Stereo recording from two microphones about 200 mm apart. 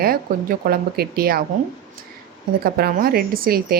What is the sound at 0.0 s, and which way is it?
Speech, 50° right (ahead or behind).